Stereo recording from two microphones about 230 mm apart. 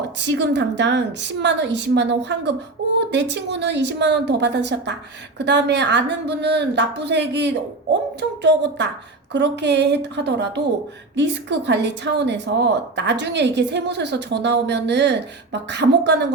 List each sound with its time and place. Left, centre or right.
0.2 s speech: right